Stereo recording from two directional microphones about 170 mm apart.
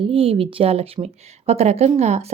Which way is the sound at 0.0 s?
30° right (ahead or behind).